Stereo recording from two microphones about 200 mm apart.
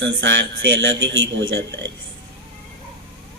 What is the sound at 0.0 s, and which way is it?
A man's voice, 65° right (ahead or behind).